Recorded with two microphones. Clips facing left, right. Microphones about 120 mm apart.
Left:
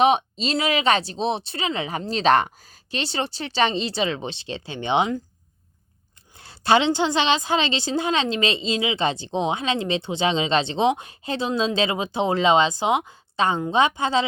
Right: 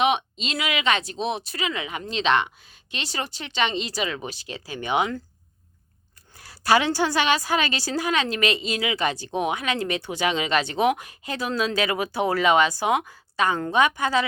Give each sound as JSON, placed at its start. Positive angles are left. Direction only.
{"t": 0.0, "sound": "speech", "side_deg": 35}
{"t": 2.9, "sound": "a woman's voice", "side_deg": 30}
{"t": 6.3, "sound": "a woman's voice", "side_deg": 25}